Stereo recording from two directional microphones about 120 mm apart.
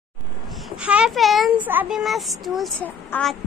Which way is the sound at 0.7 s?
10° right (ahead or behind).